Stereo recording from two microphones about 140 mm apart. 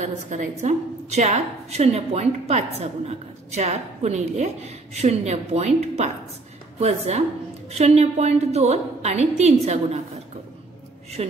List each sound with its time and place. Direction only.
0.0 s a woman's voice: 60° right (ahead or behind)
11.2 s a woman's voice: 45° right (ahead or behind)